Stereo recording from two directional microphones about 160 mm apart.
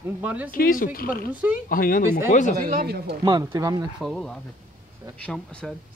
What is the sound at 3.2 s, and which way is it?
Speech, 25° right (ahead or behind).